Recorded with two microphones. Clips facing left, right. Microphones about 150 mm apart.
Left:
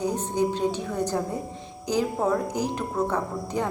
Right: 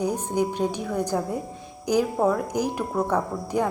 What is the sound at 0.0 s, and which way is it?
A woman's voice, 10° right (ahead or behind).